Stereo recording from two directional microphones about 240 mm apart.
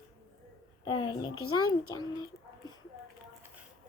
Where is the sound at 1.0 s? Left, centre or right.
Centre.